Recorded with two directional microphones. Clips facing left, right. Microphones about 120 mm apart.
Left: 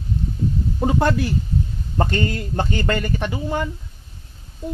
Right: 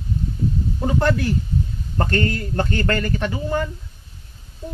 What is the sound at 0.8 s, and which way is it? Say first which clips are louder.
A man's voice: left 1 dB; 15° left (ahead or behind).